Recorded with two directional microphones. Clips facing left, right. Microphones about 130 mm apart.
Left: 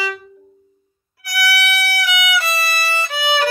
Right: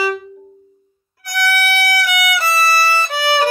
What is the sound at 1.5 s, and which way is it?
Violin, 40° right (ahead or behind).